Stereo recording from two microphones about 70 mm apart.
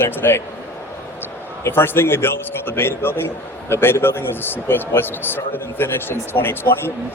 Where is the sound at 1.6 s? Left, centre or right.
Left.